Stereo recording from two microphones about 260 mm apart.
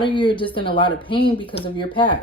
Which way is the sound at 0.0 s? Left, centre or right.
Centre.